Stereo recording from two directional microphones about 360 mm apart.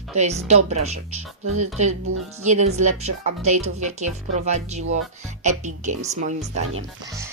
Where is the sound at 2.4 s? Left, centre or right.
Centre.